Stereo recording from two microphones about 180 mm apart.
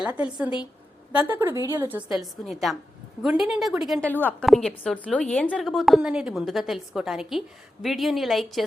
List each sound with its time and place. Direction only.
0.0 s a woman's voice: 5° right (ahead or behind)
4.0 s a woman's voice: 10° left (ahead or behind)